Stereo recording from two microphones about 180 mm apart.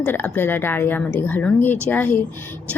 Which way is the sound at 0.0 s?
10° left (ahead or behind).